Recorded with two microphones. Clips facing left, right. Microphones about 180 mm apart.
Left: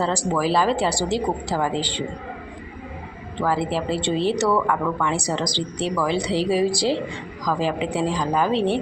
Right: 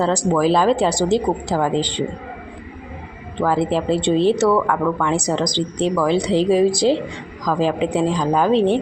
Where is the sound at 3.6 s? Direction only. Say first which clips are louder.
Right 5 dB; 20° right (ahead or behind).